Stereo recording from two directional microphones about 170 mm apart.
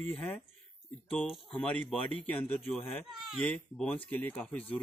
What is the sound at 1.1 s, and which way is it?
Speech, 5° left (ahead or behind).